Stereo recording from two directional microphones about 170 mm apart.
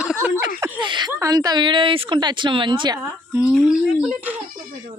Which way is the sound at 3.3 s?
10° right (ahead or behind).